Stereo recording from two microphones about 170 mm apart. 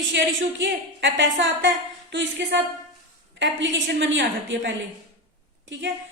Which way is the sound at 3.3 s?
90° right.